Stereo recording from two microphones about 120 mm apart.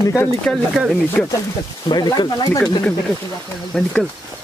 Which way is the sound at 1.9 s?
35° left (ahead or behind).